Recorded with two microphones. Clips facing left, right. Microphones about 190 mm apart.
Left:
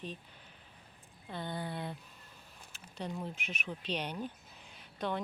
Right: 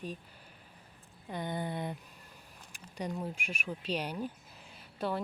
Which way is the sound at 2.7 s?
15° right (ahead or behind).